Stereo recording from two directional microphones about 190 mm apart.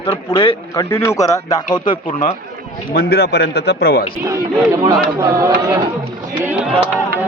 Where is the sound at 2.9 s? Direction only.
55° left (ahead or behind).